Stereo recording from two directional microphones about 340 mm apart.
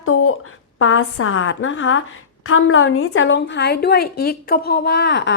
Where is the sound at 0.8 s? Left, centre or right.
Left.